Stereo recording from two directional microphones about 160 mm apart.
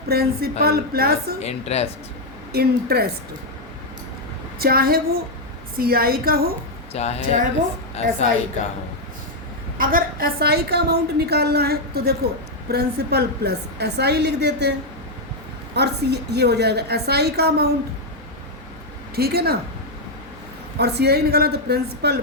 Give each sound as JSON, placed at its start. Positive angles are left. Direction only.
{"t": 0.1, "sound": "a woman's voice", "side_deg": -75}
{"t": 1.4, "sound": "a woman's voice", "side_deg": 40}
{"t": 2.5, "sound": "a woman's voice", "side_deg": -75}
{"t": 4.6, "sound": "a woman's voice", "side_deg": -70}
{"t": 6.9, "sound": "a woman's voice", "side_deg": 40}
{"t": 9.7, "sound": "a woman's voice", "side_deg": -65}
{"t": 15.7, "sound": "a woman's voice", "side_deg": -90}
{"t": 19.1, "sound": "a woman's voice", "side_deg": -75}
{"t": 20.7, "sound": "a woman's voice", "side_deg": -90}